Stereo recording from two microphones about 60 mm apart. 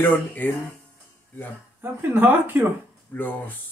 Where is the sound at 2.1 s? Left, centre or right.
Right.